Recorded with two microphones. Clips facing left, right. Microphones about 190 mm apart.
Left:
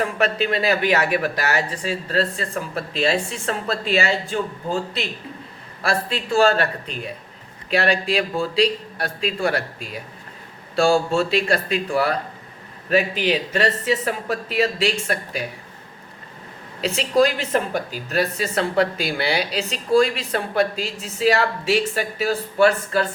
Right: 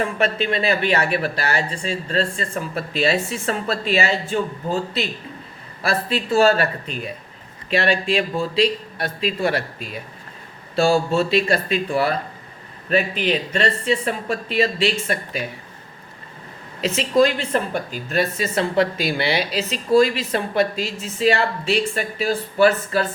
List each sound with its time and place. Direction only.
0.0 s speech: centre (ahead or behind)
16.8 s speech: centre (ahead or behind)